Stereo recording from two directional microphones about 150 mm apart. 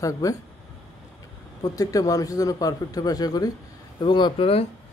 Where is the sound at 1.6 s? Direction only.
25° left (ahead or behind).